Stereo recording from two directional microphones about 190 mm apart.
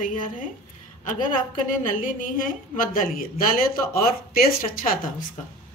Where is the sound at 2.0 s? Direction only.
45° left (ahead or behind).